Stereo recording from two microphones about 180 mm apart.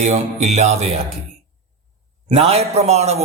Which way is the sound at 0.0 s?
40° right (ahead or behind).